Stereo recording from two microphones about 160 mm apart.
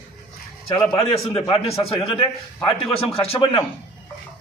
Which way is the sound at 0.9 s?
35° left (ahead or behind).